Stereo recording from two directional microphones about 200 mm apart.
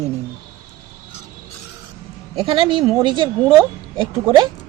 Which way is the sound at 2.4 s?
25° right (ahead or behind).